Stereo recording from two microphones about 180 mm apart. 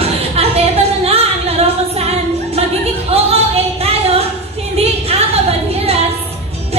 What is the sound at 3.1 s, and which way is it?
Singing, 35° right (ahead or behind).